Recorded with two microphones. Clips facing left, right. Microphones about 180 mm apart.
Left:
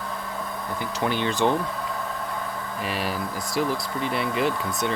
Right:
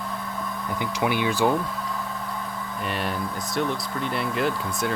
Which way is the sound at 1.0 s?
10° right (ahead or behind).